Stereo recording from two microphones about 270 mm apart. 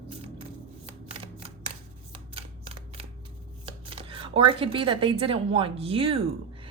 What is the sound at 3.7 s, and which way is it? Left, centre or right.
Speech, centre.